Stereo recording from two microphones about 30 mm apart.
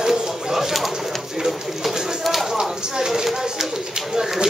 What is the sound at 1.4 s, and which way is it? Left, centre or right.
Bird, centre.